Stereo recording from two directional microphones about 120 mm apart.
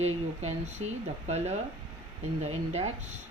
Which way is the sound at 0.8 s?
50° right (ahead or behind).